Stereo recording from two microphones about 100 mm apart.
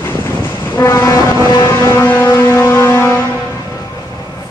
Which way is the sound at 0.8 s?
30° left (ahead or behind).